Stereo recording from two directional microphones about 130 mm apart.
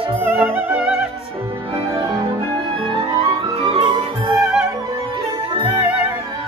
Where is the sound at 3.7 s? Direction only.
45° right (ahead or behind).